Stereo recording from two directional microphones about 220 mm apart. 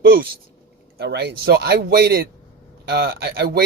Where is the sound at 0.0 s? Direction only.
45° right (ahead or behind).